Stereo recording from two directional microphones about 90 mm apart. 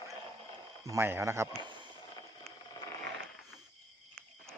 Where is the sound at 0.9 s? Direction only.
25° right (ahead or behind).